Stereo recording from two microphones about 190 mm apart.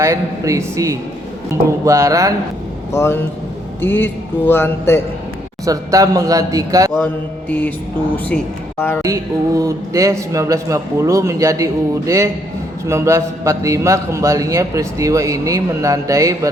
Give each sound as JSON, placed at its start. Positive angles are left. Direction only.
{"t": 0.0, "sound": "a man's voice", "side_deg": -15}
{"t": 2.9, "sound": "speech", "side_deg": 15}
{"t": 5.6, "sound": "a man's voice", "side_deg": -20}
{"t": 9.0, "sound": "a man's voice", "side_deg": -15}